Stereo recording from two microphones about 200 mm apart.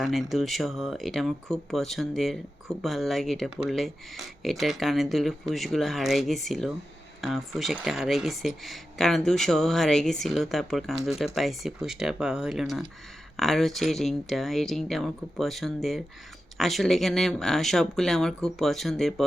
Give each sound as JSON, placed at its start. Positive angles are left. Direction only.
{"t": 0.0, "sound": "speech", "side_deg": 0}